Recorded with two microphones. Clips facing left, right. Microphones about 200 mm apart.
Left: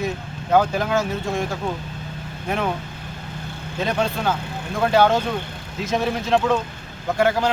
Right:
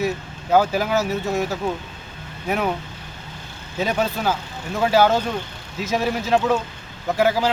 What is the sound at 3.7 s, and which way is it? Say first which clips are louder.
Speech: right 1 dB; 5° right (ahead or behind).